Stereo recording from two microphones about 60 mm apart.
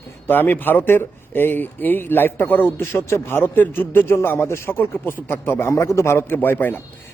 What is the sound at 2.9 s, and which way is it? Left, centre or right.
A man's voice, left.